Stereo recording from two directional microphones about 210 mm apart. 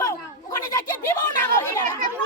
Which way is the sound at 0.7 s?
15° left (ahead or behind).